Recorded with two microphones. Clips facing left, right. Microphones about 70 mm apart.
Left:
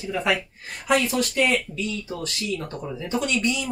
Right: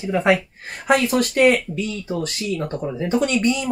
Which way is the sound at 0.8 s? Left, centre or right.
Right.